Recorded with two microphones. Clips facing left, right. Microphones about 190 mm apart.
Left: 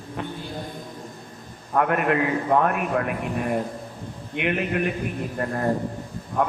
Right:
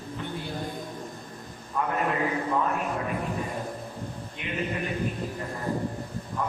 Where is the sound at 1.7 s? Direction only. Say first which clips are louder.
Left 6 dB; 70° left (ahead or behind).